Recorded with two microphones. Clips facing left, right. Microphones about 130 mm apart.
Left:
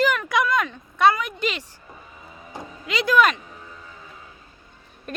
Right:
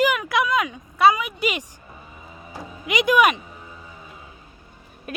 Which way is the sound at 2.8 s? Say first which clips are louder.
Right 1 dB; 15° right (ahead or behind).